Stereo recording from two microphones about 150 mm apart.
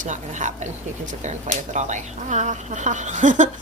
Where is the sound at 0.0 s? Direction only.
55° right (ahead or behind).